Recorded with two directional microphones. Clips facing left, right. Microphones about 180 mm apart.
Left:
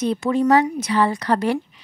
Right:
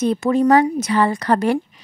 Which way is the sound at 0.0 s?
45° right (ahead or behind).